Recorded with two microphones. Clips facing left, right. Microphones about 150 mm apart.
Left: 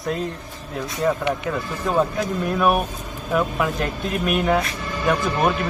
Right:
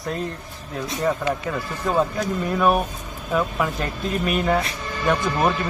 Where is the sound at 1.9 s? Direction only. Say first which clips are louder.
Left 1 dB; 5° left (ahead or behind).